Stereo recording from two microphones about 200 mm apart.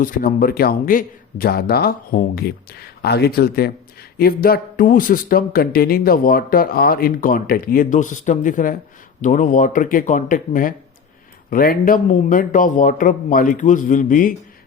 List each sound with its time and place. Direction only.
0.0 s a man's voice: 45° left (ahead or behind)